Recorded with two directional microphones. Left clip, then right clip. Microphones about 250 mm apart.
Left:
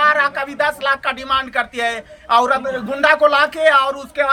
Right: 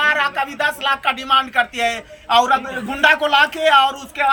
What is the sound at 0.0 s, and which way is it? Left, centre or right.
A man's voice, centre.